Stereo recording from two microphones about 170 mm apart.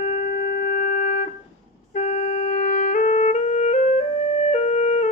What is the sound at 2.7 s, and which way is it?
Music, 50° left (ahead or behind).